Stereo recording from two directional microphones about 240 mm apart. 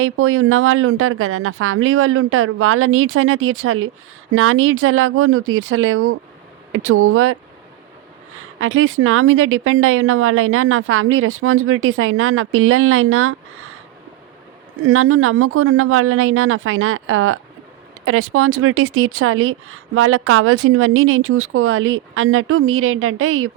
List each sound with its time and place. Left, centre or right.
0.0 s speech: right
8.4 s speech: right
14.8 s speech: right